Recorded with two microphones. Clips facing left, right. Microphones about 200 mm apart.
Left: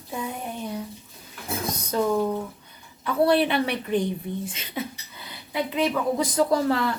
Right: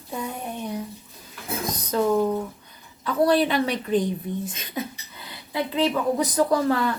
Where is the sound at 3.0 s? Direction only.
30° left (ahead or behind).